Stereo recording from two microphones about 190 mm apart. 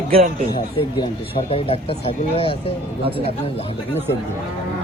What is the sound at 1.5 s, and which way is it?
Speech, 30° left (ahead or behind).